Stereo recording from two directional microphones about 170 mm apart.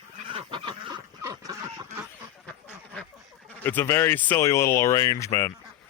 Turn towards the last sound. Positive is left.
turn(degrees=15)  # may be behind; listen again after turning